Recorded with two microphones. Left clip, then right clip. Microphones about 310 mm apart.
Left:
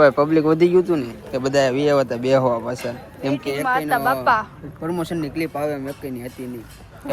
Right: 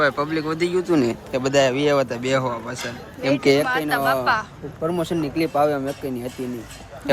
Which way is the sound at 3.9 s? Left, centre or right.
Centre.